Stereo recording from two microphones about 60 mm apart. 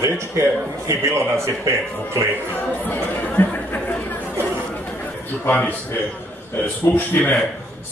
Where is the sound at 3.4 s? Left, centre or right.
Left.